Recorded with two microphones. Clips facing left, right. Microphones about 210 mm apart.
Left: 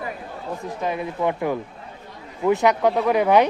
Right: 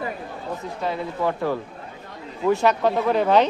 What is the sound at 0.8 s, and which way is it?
Speech, 15° left (ahead or behind).